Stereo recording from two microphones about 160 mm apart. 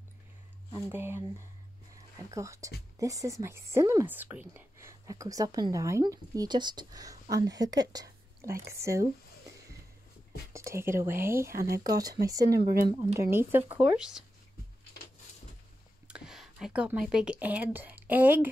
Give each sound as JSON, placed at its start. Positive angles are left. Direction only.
{"t": 0.7, "sound": "speech", "side_deg": -15}
{"t": 2.3, "sound": "speech", "side_deg": -20}
{"t": 10.5, "sound": "speech", "side_deg": -20}
{"t": 16.1, "sound": "speech", "side_deg": 0}